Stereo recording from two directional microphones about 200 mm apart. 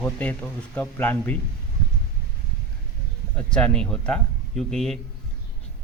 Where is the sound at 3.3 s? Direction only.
5° left (ahead or behind).